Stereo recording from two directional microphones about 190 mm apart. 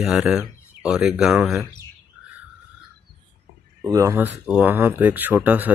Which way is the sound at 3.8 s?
15° right (ahead or behind).